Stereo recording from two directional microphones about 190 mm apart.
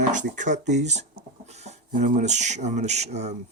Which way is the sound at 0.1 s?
40° right (ahead or behind).